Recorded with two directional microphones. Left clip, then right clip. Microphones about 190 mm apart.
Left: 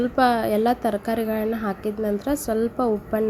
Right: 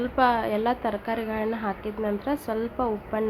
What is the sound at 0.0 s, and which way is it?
A woman's voice, 20° left (ahead or behind).